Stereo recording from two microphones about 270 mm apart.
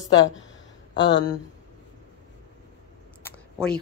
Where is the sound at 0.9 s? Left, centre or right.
Left.